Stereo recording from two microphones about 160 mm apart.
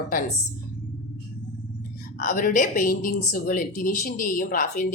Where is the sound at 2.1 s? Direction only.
60° left (ahead or behind).